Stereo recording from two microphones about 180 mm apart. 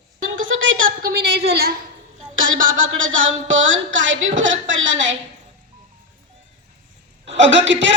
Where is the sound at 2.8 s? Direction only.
90° right.